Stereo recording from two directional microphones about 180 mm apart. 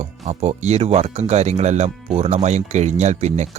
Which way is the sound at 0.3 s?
35° right (ahead or behind).